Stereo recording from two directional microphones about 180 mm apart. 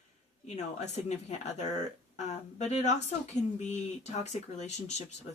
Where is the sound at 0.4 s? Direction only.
40° left (ahead or behind).